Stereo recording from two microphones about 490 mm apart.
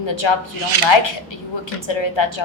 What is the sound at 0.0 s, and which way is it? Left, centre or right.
Speech, left.